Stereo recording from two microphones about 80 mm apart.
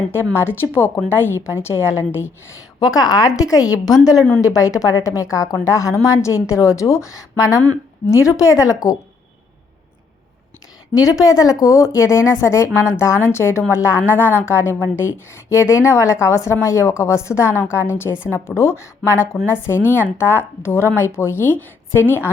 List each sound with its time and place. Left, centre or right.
0.3 s a woman's voice: left
2.8 s a woman's voice: left
10.9 s a woman's voice: left